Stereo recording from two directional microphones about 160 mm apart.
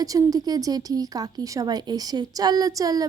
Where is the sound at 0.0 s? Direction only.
20° right (ahead or behind).